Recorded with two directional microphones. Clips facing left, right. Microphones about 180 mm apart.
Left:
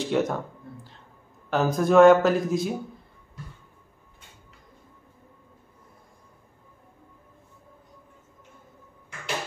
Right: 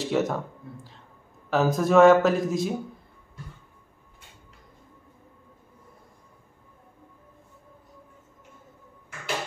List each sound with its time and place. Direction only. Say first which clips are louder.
0.0 s speech: even; centre (ahead or behind)
1.5 s speech: even; centre (ahead or behind)